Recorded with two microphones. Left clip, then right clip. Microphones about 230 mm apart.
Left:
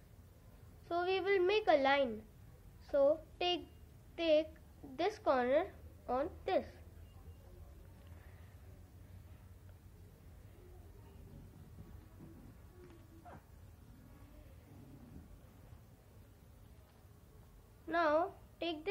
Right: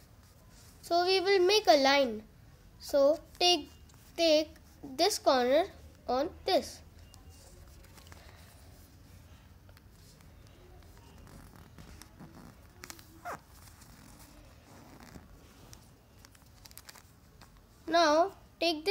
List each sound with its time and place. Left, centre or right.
0.8 s a child's voice: right
17.8 s a woman's voice: right